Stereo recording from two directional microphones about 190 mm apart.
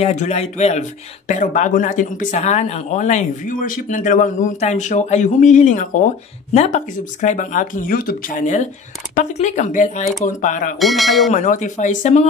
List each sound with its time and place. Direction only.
0.0 s speech: 35° left (ahead or behind)
10.8 s speech: centre (ahead or behind)
11.3 s speech: 40° left (ahead or behind)